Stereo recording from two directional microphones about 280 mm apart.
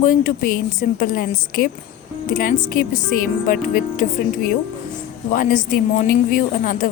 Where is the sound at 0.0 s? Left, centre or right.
Left.